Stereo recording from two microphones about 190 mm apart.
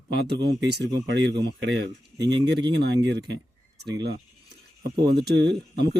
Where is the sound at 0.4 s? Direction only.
65° right (ahead or behind).